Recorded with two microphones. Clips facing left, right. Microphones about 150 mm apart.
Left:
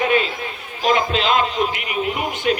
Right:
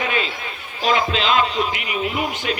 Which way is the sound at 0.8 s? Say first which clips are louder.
Left 1 dB; 50° left (ahead or behind).